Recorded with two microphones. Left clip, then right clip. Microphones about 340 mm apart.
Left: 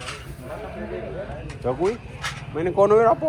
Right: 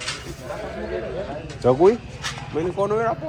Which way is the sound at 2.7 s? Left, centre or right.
Left.